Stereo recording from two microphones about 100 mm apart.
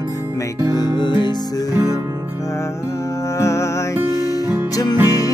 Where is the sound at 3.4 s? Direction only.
30° left (ahead or behind).